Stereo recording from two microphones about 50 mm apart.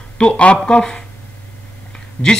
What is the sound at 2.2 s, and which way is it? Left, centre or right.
Speech, left.